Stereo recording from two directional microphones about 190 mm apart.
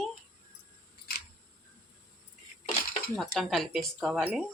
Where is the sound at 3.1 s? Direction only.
Centre (ahead or behind).